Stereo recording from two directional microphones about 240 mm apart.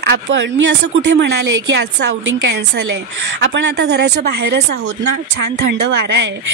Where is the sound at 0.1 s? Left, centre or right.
Right.